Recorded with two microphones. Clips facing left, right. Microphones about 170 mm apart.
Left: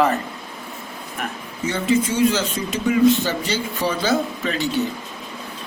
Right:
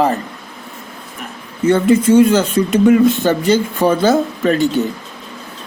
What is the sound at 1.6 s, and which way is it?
Speech, 55° right (ahead or behind).